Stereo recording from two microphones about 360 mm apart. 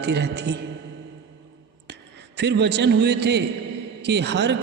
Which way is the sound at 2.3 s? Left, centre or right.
Right.